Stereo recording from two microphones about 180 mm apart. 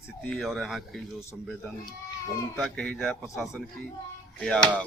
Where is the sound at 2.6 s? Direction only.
5° left (ahead or behind).